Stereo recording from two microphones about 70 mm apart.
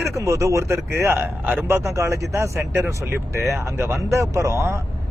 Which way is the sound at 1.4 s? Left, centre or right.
Right.